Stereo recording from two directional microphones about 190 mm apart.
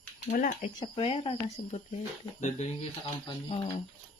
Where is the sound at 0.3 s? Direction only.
40° left (ahead or behind).